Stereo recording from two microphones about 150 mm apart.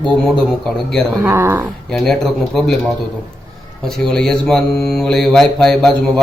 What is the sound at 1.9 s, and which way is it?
Speech, centre (ahead or behind).